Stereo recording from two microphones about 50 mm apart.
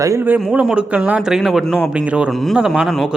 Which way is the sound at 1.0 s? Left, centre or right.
Right.